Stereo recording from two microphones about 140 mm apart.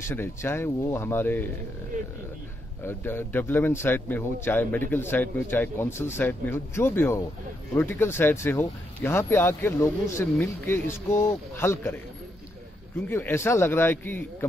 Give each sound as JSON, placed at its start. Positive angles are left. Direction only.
{"t": 0.1, "sound": "a man's voice", "side_deg": 20}
{"t": 2.8, "sound": "a man's voice", "side_deg": 15}
{"t": 13.1, "sound": "a man's voice", "side_deg": 15}